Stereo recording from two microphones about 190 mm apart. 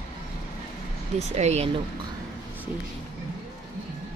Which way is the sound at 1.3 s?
35° right (ahead or behind).